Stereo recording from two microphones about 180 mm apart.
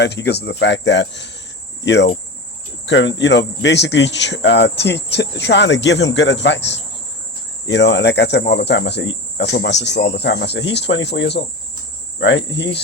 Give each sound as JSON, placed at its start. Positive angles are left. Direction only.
{"t": 0.0, "sound": "speech", "side_deg": 70}
{"t": 1.8, "sound": "cricket", "side_deg": 75}
{"t": 2.8, "sound": "cricket", "side_deg": 85}
{"t": 3.2, "sound": "speech", "side_deg": 75}
{"t": 12.5, "sound": "speech", "side_deg": 75}